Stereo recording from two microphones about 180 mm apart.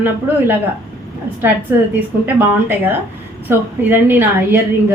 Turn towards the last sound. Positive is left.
turn(degrees=-10)  # may be behind; listen again after turning